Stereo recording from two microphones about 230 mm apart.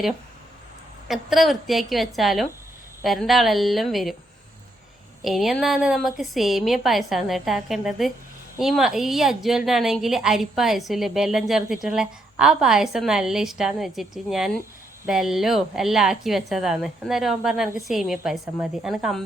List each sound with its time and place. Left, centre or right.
1.0 s a woman's voice: centre
5.2 s a woman's voice: centre